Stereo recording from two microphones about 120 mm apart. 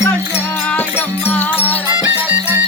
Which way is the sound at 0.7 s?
15° left (ahead or behind).